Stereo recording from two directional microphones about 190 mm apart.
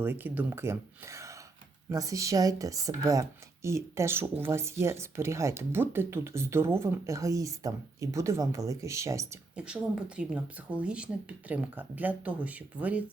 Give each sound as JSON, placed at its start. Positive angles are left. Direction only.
{"t": 0.0, "sound": "a woman's voice", "side_deg": -10}